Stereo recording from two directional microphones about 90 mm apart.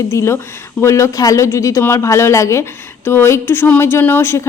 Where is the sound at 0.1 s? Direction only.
35° left (ahead or behind).